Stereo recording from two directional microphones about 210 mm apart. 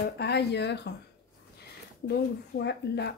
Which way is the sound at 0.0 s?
50° left (ahead or behind).